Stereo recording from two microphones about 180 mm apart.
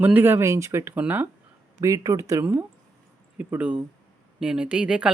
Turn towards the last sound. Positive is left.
turn(degrees=-5)  # may be behind; listen again after turning